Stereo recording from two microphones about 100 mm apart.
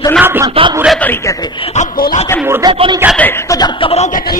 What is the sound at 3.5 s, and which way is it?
Speech, 45° left (ahead or behind).